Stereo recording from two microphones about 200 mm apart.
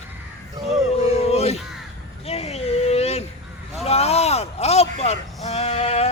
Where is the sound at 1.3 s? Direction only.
30° left (ahead or behind).